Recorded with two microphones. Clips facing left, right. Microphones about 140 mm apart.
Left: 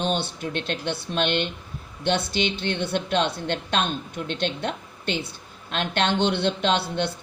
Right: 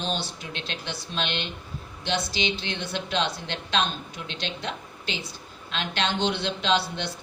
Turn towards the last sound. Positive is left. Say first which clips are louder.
# left 2 dB
turn(degrees=55)  # may be behind; listen again after turning